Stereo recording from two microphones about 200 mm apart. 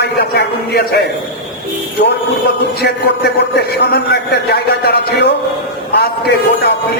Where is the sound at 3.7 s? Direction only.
55° left (ahead or behind).